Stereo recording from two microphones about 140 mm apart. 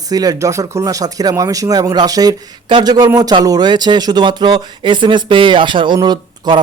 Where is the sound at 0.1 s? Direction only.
25° right (ahead or behind).